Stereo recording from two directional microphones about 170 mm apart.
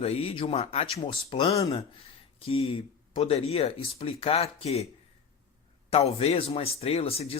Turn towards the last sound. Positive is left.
turn(degrees=35)  # may be behind; listen again after turning